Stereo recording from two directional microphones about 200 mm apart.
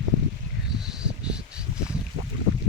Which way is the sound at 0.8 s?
5° right (ahead or behind).